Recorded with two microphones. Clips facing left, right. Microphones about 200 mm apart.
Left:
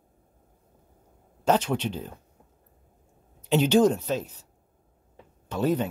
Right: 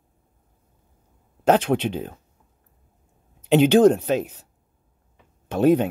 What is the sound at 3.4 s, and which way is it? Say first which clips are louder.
Speech: right 5 dB; 60° right (ahead or behind).